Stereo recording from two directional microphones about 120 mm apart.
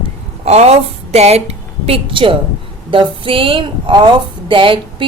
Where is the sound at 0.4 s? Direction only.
60° right (ahead or behind).